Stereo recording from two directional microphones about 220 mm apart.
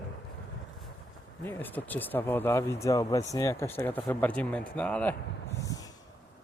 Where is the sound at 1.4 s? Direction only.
10° left (ahead or behind).